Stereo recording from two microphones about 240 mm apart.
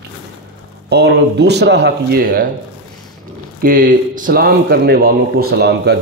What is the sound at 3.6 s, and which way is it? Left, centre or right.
Speech, right.